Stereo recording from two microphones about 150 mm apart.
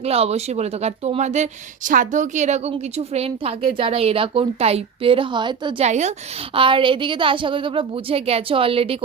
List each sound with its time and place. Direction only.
0.0 s speech: 45° right (ahead or behind)
5.8 s a woman's voice: 50° right (ahead or behind)